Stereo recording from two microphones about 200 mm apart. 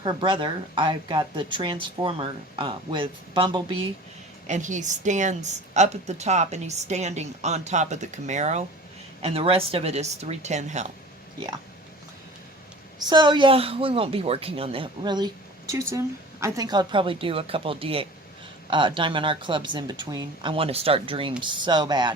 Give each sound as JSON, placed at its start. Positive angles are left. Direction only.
{"t": 0.0, "sound": "a woman's voice", "side_deg": -25}
{"t": 4.4, "sound": "a woman's voice", "side_deg": -35}
{"t": 13.0, "sound": "a woman's voice", "side_deg": -20}